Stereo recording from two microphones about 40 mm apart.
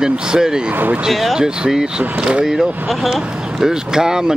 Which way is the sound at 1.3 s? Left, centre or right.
Centre.